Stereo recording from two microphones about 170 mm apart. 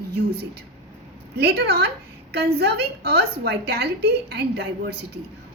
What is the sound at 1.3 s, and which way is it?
A woman's voice, 70° right (ahead or behind).